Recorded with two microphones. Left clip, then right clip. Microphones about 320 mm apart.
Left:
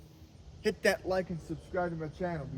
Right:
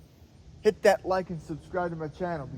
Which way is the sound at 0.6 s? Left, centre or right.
Centre.